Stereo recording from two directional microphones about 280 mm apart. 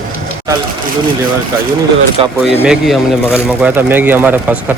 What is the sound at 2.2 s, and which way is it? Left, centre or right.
Speech, right.